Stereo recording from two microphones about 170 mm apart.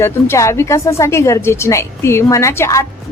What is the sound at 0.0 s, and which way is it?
A woman's voice, 15° left (ahead or behind).